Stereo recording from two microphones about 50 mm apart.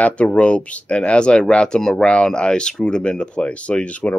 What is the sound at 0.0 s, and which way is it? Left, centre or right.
Speech, left.